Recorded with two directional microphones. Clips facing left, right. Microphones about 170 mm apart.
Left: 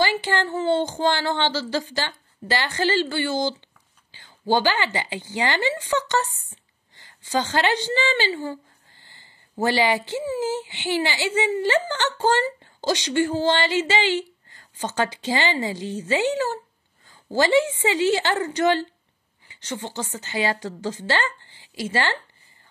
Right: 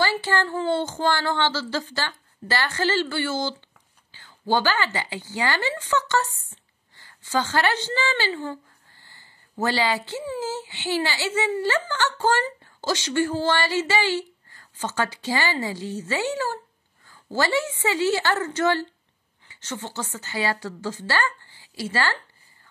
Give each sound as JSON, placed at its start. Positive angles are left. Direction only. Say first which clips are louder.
{"t": 0.0, "sound": "speech", "louder": "left 1 dB", "side_deg": 15}
{"t": 9.0, "sound": "a sound", "louder": "even", "side_deg": 20}
{"t": 10.4, "sound": "a woman's voice", "louder": "left 4 dB", "side_deg": 15}